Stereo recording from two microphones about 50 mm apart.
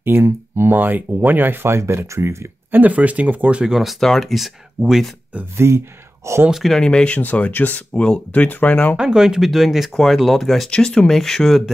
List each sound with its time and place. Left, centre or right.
0.0 s speech: right
1.7 s speech: right
2.7 s speech: right
3.6 s speech: centre
4.0 s speech: centre
5.6 s speech: right
6.5 s speech: centre
6.8 s speech: centre
7.2 s speech: left
7.9 s speech: centre
8.3 s speech: left
8.9 s speech: centre